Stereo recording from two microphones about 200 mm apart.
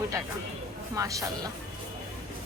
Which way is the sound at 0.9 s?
15° right (ahead or behind).